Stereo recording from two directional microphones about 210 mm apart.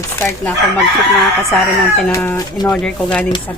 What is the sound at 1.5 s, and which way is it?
Speech, centre (ahead or behind).